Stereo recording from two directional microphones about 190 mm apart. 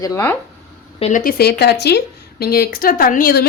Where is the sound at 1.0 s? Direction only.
40° left (ahead or behind).